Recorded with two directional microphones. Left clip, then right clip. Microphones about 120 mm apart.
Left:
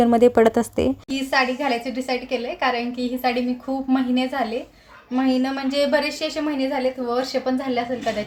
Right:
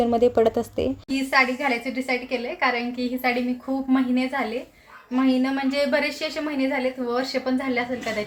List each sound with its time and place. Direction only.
0.0 s speech: 65° left (ahead or behind)
1.1 s a woman's voice: 20° left (ahead or behind)